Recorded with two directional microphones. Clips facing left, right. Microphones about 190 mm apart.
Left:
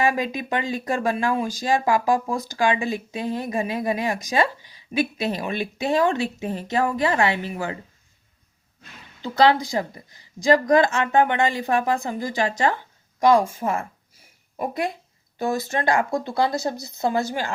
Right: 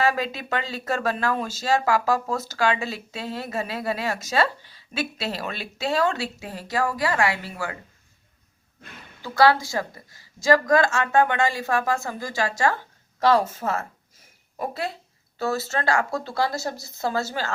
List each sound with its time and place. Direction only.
0.0 s speech: 15° left (ahead or behind)
9.2 s a woman's voice: 20° left (ahead or behind)